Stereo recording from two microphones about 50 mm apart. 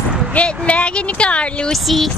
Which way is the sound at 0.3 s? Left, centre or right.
Left.